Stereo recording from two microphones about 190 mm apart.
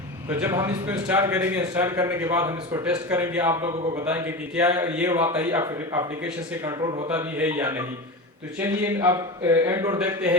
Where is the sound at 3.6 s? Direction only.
20° right (ahead or behind).